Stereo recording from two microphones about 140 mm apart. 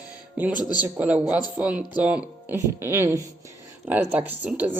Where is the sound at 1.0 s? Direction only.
10° right (ahead or behind).